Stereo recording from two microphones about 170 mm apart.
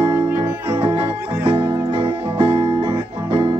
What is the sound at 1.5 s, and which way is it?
Music, 35° right (ahead or behind).